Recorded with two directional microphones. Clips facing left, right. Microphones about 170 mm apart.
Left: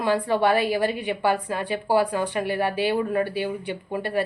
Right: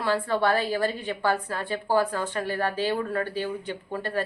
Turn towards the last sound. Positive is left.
turn(degrees=10)  # may be behind; listen again after turning